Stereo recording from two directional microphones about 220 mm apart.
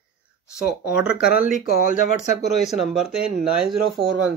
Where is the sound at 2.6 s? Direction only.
Centre (ahead or behind).